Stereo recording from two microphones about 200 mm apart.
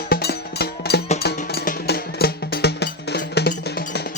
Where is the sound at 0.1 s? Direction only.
55° left (ahead or behind).